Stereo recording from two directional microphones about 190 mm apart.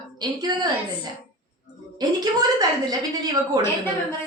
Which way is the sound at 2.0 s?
20° right (ahead or behind).